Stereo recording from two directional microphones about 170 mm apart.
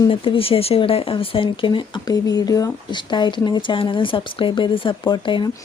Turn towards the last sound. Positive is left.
turn(degrees=25)  # may be behind; listen again after turning